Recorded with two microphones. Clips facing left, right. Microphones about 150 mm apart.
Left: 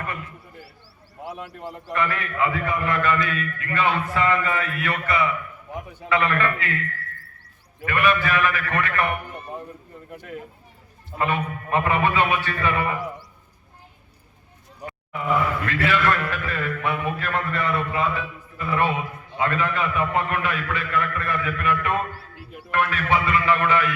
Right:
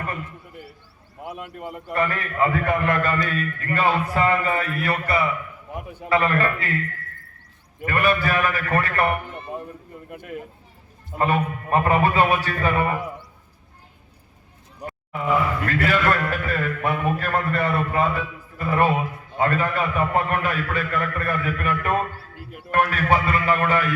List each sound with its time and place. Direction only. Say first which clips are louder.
1.9 s a man's voice: right 1 dB; 40° right (ahead or behind)
7.9 s a man's voice: even; 40° right (ahead or behind)
9.9 s speech: right 2 dB; 10° right (ahead or behind)
11.2 s a man's voice: right 3 dB; 40° right (ahead or behind)
15.6 s a man's voice: right 1 dB; 40° right (ahead or behind)